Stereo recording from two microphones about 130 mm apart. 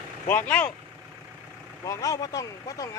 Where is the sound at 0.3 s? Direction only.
15° left (ahead or behind).